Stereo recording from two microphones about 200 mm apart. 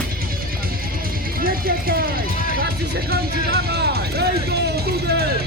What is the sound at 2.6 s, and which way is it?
Music, 50° right (ahead or behind).